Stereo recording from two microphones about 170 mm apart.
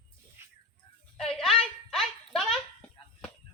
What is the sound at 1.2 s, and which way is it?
A woman's voice, centre (ahead or behind).